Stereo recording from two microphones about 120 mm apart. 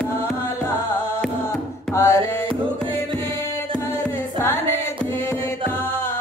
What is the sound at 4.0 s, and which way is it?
Music, 20° left (ahead or behind).